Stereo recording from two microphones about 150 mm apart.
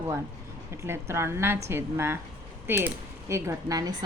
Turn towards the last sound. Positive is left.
turn(degrees=-25)  # may be behind; listen again after turning